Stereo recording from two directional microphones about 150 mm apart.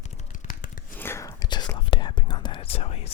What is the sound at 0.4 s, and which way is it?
Tearing, 65° left (ahead or behind).